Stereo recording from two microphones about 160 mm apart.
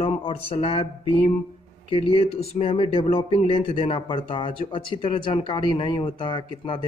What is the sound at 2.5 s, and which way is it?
Speech, 35° left (ahead or behind).